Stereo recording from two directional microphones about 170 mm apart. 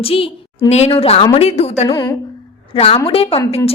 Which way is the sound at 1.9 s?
20° left (ahead or behind).